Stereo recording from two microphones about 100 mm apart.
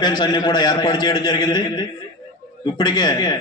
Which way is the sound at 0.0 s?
45° left (ahead or behind).